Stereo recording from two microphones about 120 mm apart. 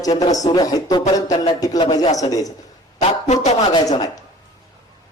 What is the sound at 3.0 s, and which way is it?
Speech, 70° left (ahead or behind).